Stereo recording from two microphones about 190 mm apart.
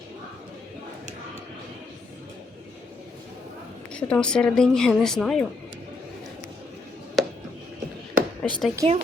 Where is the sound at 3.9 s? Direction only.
5° left (ahead or behind).